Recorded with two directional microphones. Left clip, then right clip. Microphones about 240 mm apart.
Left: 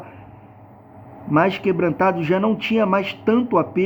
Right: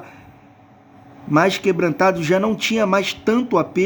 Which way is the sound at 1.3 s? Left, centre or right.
Right.